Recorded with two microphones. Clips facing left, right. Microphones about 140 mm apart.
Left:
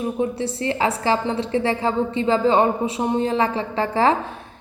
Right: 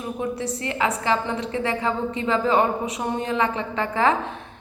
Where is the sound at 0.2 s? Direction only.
30° left (ahead or behind).